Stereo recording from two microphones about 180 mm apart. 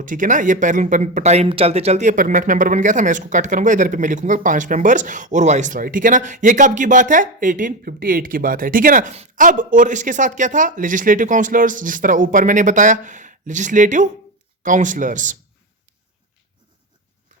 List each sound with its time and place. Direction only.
0.0 s speech: 45° right (ahead or behind)